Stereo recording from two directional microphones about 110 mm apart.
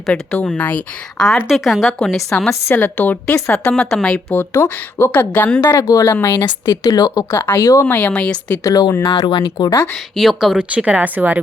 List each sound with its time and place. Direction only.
0.1 s a woman's voice: 10° left (ahead or behind)
1.5 s a woman's voice: centre (ahead or behind)
2.5 s a woman's voice: 20° left (ahead or behind)
4.4 s a woman's voice: 25° left (ahead or behind)
5.7 s speech: 30° left (ahead or behind)
7.3 s speech: 20° left (ahead or behind)
7.6 s speech: 35° left (ahead or behind)
7.9 s a woman's voice: 15° left (ahead or behind)
8.6 s speech: 35° left (ahead or behind)
9.6 s speech: 25° left (ahead or behind)
10.2 s speech: centre (ahead or behind)